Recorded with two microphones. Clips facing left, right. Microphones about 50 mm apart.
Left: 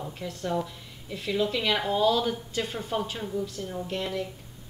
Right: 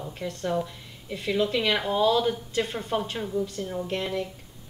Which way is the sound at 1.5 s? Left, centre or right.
Right.